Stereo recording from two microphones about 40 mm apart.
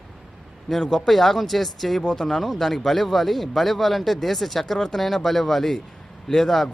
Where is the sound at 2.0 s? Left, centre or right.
Left.